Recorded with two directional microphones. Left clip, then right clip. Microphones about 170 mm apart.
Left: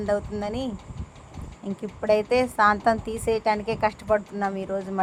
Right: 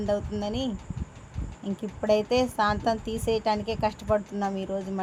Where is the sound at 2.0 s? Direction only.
15° left (ahead or behind).